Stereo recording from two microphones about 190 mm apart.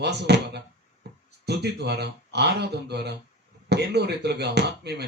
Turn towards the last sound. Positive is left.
turn(degrees=-60)  # may be behind; listen again after turning